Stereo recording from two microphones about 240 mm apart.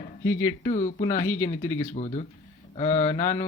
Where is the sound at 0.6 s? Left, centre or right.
Left.